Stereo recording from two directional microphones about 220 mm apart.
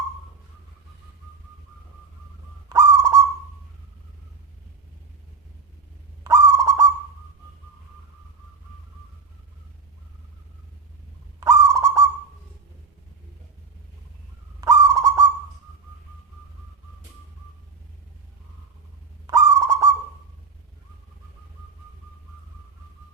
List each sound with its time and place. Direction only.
2.6 s owl: 15° right (ahead or behind)
6.2 s owl: 15° right (ahead or behind)
11.3 s owl: 15° right (ahead or behind)
14.6 s owl: 15° right (ahead or behind)
19.3 s owl: 15° right (ahead or behind)